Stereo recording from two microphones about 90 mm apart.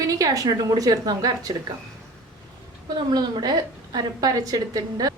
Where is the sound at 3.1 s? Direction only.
50° right (ahead or behind).